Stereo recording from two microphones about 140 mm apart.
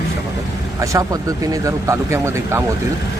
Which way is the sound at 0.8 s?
25° right (ahead or behind).